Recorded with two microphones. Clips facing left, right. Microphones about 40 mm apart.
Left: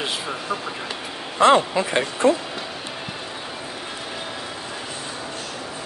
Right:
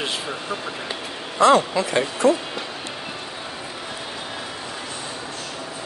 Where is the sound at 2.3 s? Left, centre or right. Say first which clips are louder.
Right 1 dB; centre.